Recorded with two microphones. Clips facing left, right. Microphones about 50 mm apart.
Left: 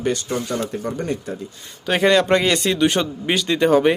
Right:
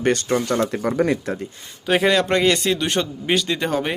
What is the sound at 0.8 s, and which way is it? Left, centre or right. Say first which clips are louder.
Speech: right 5 dB; right.